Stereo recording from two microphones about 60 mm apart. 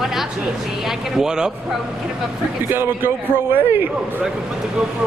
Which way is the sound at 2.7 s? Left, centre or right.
Right.